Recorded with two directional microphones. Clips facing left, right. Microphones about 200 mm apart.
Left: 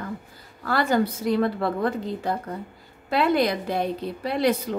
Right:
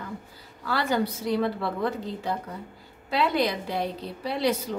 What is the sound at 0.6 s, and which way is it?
A woman's voice, 50° left (ahead or behind).